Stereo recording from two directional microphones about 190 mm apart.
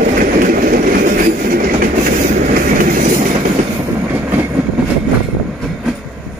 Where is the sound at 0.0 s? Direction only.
45° right (ahead or behind).